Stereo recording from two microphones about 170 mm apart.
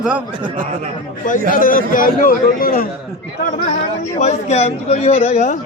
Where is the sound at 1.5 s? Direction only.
55° left (ahead or behind).